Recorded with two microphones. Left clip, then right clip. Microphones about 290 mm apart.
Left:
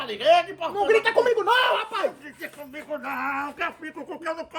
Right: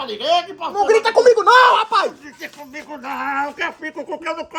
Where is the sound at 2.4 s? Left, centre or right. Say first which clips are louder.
Right 4 dB; centre.